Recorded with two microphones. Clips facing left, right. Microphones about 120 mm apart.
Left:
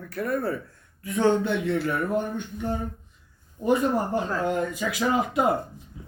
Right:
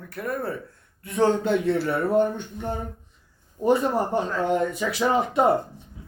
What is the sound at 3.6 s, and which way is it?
Speech, 30° right (ahead or behind).